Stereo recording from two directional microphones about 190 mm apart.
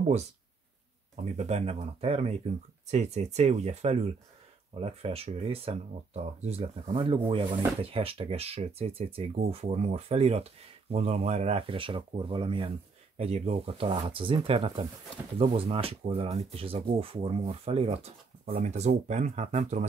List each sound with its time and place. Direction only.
1.3 s speech: 35° right (ahead or behind)